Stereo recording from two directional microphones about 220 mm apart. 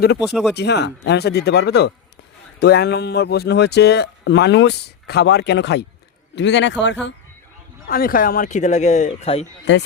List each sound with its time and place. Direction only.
0.2 s speech: 5° right (ahead or behind)
0.5 s speech: 50° left (ahead or behind)
7.9 s speech: 40° left (ahead or behind)